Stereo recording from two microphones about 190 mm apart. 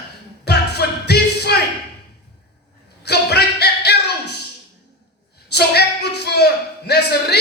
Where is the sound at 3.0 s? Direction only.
60° left (ahead or behind).